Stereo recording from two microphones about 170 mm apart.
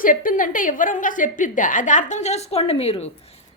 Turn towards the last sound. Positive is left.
turn(degrees=35)  # may be behind; listen again after turning